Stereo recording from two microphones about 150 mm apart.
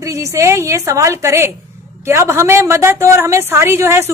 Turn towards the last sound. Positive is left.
turn(degrees=-15)  # may be behind; listen again after turning